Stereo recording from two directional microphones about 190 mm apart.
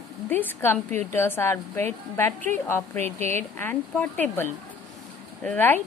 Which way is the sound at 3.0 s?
35° right (ahead or behind).